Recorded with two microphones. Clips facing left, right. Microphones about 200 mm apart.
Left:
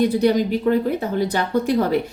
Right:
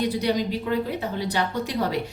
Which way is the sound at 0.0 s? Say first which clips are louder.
Left 7 dB; 50° left (ahead or behind).